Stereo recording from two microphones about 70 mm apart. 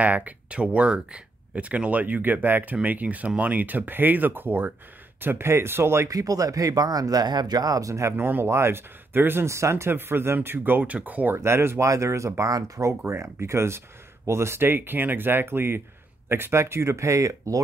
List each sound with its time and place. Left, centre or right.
0.0 s speech: right
6.0 s speech: right
8.2 s speech: right
11.3 s speech: right